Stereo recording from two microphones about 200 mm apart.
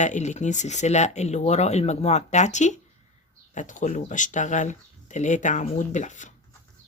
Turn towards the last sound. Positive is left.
turn(degrees=40)  # may be behind; listen again after turning